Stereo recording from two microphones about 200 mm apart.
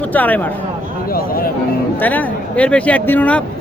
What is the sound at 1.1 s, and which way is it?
Speech, 45° left (ahead or behind).